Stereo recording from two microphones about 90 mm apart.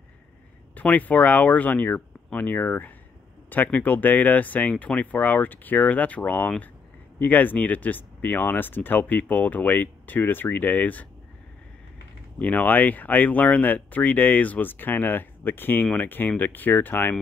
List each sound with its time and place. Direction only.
0.7 s speech: 20° left (ahead or behind)
12.4 s speech: 15° left (ahead or behind)